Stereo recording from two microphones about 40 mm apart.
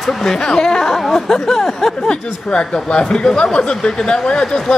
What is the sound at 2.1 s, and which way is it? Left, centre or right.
Speech, left.